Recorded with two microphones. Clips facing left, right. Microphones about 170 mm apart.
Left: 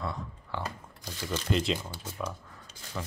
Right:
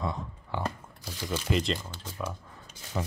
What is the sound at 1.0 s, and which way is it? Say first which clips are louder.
Speech: even; 10° right (ahead or behind).